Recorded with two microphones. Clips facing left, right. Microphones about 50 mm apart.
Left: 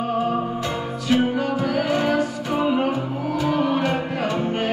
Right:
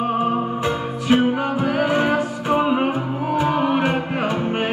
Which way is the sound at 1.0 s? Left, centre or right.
Right.